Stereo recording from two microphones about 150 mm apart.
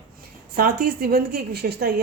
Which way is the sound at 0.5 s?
90° right.